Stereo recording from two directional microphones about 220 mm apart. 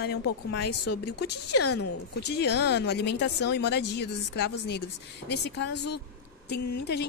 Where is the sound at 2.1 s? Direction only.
50° left (ahead or behind).